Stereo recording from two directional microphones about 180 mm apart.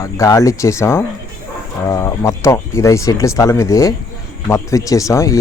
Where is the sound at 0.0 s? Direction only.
20° left (ahead or behind).